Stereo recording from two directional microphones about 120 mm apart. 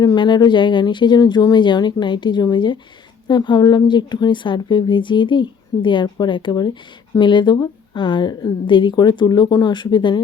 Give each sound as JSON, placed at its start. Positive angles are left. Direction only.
{"t": 0.0, "sound": "a woman's voice", "side_deg": 35}